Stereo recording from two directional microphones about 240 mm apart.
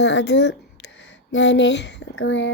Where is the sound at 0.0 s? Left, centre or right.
Left.